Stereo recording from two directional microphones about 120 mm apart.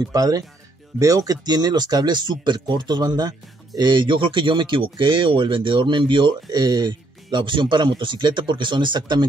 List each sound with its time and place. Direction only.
0.0 s speech: 30° right (ahead or behind)